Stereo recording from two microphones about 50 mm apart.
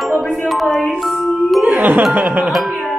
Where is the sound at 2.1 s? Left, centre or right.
Right.